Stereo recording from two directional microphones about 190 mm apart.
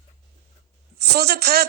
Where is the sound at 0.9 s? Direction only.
55° right (ahead or behind).